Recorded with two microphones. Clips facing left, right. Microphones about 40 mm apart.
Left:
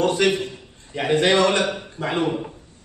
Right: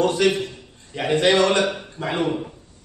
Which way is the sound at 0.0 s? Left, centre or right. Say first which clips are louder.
Even; centre.